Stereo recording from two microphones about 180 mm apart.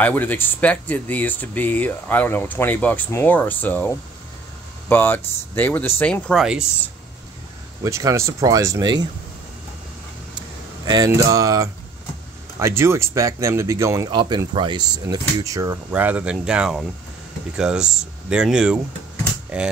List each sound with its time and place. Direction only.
0.0 s speech: 10° left (ahead or behind)
7.8 s speech: 15° right (ahead or behind)
10.9 s speech: 20° right (ahead or behind)
15.9 s speech: 10° right (ahead or behind)